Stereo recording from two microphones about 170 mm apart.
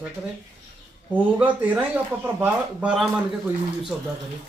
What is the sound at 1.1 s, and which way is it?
Speech, 10° right (ahead or behind).